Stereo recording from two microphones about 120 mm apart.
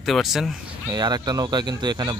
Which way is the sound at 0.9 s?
35° right (ahead or behind).